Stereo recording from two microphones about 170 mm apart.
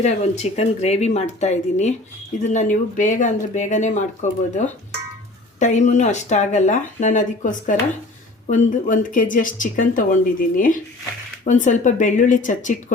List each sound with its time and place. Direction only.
0.0 s speech: 40° left (ahead or behind)
11.4 s speech: 45° left (ahead or behind)